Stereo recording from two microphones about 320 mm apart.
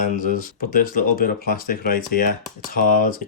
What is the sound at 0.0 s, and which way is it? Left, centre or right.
Speech, left.